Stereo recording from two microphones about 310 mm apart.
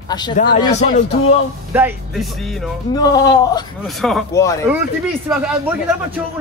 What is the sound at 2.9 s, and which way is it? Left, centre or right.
Speech, centre.